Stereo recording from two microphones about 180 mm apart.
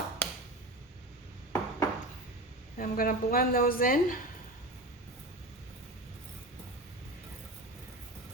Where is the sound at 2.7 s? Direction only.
55° left (ahead or behind).